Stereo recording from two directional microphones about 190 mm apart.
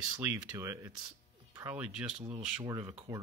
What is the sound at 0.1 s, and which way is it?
Speech, 15° right (ahead or behind).